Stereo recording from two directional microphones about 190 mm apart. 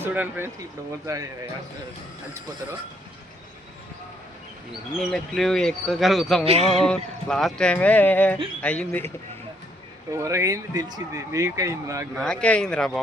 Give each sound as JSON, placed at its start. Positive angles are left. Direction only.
{"t": 0.0, "sound": "speech", "side_deg": -10}
{"t": 4.9, "sound": "speech", "side_deg": 0}
{"t": 6.4, "sound": "a sound", "side_deg": -35}
{"t": 6.7, "sound": "a man's voice", "side_deg": 5}
{"t": 10.1, "sound": "speech", "side_deg": -15}
{"t": 12.1, "sound": "speech", "side_deg": 5}